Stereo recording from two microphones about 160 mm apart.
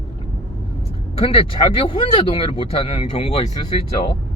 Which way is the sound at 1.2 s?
35° left (ahead or behind).